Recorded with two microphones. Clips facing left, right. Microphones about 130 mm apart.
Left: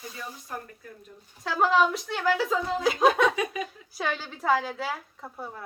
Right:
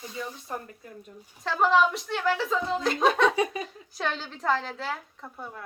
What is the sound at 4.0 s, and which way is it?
Speech, 10° left (ahead or behind).